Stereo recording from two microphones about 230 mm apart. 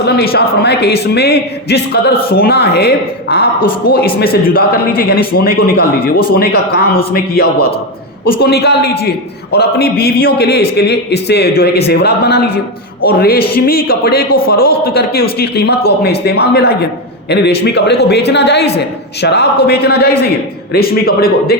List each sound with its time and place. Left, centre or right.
0.2 s a man's voice: left